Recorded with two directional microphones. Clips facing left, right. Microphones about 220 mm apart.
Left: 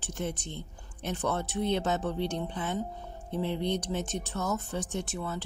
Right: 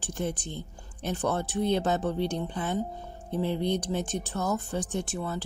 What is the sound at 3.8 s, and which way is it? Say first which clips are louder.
Speech: right 3 dB; 35° right (ahead or behind).